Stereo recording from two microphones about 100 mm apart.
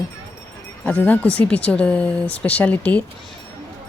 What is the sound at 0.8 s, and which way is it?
Speech, 15° left (ahead or behind).